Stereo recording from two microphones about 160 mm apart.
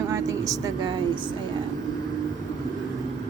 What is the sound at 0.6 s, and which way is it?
Speech, 30° right (ahead or behind).